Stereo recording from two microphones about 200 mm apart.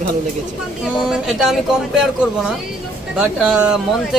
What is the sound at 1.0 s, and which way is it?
Speech, centre (ahead or behind).